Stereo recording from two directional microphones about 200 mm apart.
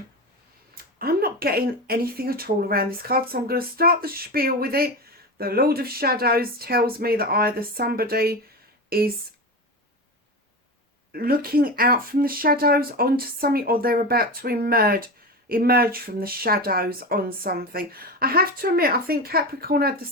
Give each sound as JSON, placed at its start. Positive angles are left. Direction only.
{"t": 0.8, "sound": "speech", "side_deg": -50}
{"t": 11.1, "sound": "speech", "side_deg": -50}